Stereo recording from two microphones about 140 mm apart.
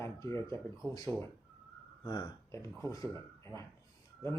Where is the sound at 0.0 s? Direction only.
20° left (ahead or behind).